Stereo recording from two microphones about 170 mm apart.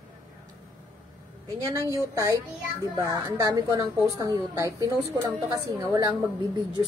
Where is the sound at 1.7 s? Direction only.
20° right (ahead or behind).